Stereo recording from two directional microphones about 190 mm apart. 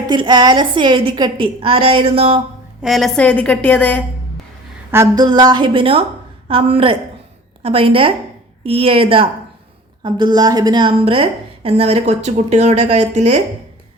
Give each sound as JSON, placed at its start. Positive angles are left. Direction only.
{"t": 0.1, "sound": "a woman's voice", "side_deg": -25}
{"t": 2.8, "sound": "a woman's voice", "side_deg": 0}
{"t": 4.9, "sound": "a woman's voice", "side_deg": -15}